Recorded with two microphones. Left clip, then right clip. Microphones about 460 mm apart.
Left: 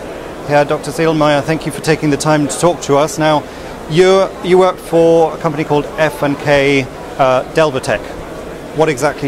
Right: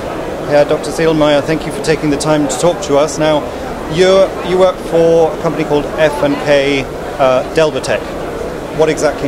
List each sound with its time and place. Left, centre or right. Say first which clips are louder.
0.5 s speech: right 1 dB; left
3.9 s speech: right 1 dB; left
8.7 s a man's voice: right 1 dB; left